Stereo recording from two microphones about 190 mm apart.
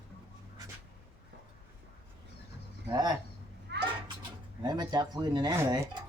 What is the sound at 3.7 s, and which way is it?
Children playing, 65° right (ahead or behind).